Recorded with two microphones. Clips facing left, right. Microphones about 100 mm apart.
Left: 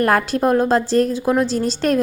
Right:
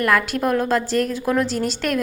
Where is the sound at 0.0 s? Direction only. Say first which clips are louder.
Left 3 dB; 35° left (ahead or behind).